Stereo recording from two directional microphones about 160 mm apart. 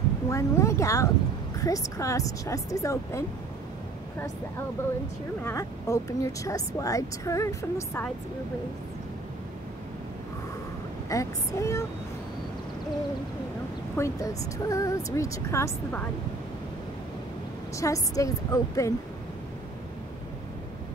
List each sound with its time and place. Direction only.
0.3 s a woman's voice: 20° left (ahead or behind)
5.4 s a woman's voice: 15° left (ahead or behind)
11.1 s a woman's voice: 20° left (ahead or behind)
13.9 s a woman's voice: 20° left (ahead or behind)
17.7 s a woman's voice: 20° left (ahead or behind)